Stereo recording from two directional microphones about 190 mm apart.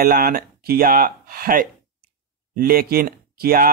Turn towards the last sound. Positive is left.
turn(degrees=-50)  # may be behind; listen again after turning